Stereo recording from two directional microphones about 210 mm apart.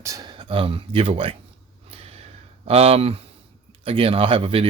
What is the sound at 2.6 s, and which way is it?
Speech, 30° right (ahead or behind).